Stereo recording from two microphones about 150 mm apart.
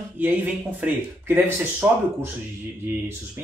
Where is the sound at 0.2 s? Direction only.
10° right (ahead or behind).